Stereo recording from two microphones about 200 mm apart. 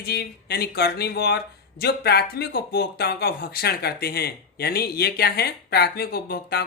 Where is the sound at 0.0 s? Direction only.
50° left (ahead or behind).